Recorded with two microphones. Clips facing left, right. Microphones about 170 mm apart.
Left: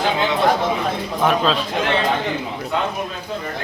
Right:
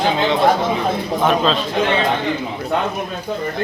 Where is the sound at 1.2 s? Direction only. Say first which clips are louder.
Right 1 dB; 5° left (ahead or behind).